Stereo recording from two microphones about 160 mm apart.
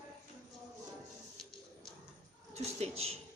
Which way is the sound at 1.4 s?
5° left (ahead or behind).